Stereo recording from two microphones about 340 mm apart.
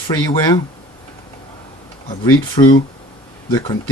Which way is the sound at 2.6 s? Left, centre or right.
Centre.